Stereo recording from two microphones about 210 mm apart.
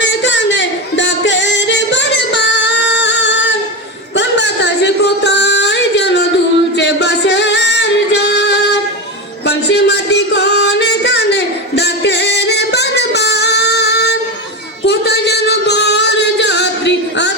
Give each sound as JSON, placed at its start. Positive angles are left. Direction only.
{"t": 0.0, "sound": "music", "side_deg": 60}
{"t": 14.8, "sound": "singing", "side_deg": 50}